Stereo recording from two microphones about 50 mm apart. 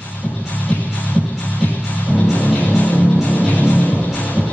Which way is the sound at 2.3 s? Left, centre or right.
Left.